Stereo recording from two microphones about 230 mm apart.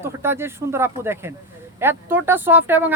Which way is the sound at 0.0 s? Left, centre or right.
Centre.